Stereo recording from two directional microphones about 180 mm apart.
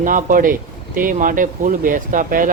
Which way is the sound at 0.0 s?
45° right (ahead or behind).